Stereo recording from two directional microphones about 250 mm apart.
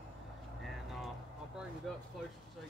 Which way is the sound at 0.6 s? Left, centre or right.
Centre.